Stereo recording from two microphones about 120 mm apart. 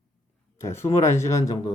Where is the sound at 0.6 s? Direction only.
20° left (ahead or behind).